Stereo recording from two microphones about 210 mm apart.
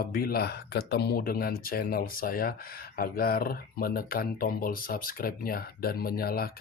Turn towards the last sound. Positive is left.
turn(degrees=45)  # may be behind; listen again after turning